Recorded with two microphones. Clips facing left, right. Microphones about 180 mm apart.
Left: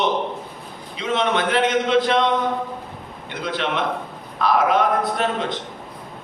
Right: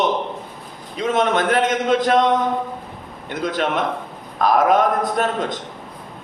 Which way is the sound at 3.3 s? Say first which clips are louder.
Right 3 dB; 45° right (ahead or behind).